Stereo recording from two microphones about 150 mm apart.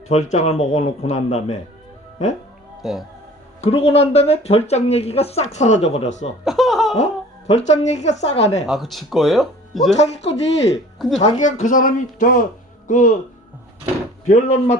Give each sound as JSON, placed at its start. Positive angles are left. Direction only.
{"t": 0.1, "sound": "speech", "side_deg": 50}
{"t": 2.8, "sound": "speech", "side_deg": 0}
{"t": 3.6, "sound": "speech", "side_deg": 40}
{"t": 6.4, "sound": "laughter", "side_deg": 0}
{"t": 6.9, "sound": "speech", "side_deg": 50}
{"t": 8.6, "sound": "speech", "side_deg": 0}
{"t": 9.9, "sound": "speech", "side_deg": 45}
{"t": 14.3, "sound": "speech", "side_deg": 50}